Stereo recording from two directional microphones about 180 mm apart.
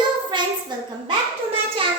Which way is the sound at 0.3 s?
25° right (ahead or behind).